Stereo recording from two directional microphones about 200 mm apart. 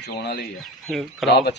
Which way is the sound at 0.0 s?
55° left (ahead or behind).